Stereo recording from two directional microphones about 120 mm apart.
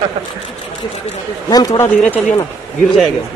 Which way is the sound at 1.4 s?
30° left (ahead or behind).